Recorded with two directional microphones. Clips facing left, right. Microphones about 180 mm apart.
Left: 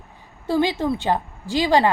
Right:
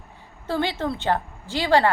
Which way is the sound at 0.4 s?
15° left (ahead or behind).